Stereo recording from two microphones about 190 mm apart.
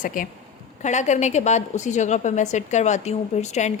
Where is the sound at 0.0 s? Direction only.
45° left (ahead or behind).